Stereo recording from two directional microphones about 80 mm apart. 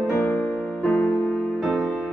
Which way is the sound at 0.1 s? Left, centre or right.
Left.